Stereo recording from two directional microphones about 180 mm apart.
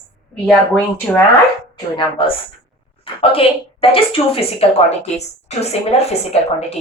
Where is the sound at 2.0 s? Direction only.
30° left (ahead or behind).